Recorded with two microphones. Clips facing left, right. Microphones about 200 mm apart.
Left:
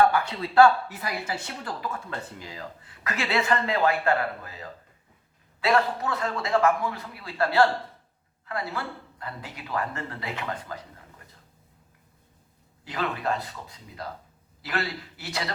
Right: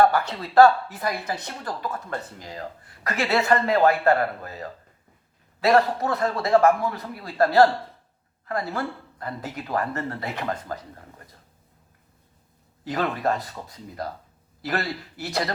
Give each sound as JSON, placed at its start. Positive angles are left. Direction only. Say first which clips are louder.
{"t": 0.0, "sound": "speech", "louder": "right 2 dB", "side_deg": -40}
{"t": 12.8, "sound": "speech", "louder": "right 5 dB", "side_deg": -40}